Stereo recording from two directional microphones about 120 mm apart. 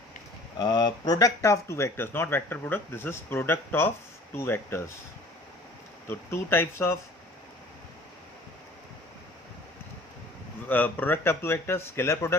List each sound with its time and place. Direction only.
0.6 s speech: 35° left (ahead or behind); by 4.9 s 20° left (ahead or behind)
6.1 s speech: 20° left (ahead or behind)
10.7 s speech: 15° left (ahead or behind)